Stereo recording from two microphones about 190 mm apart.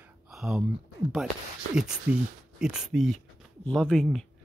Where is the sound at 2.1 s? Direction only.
5° right (ahead or behind).